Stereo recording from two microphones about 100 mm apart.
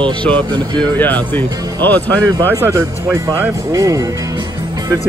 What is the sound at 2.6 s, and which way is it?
Speech, 25° right (ahead or behind).